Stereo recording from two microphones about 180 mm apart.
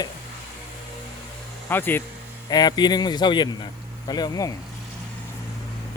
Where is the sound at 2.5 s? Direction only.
20° left (ahead or behind).